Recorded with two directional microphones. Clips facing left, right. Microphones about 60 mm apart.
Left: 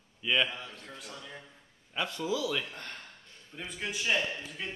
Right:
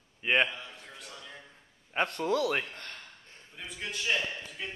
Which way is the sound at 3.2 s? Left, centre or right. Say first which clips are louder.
Right 1 dB; right.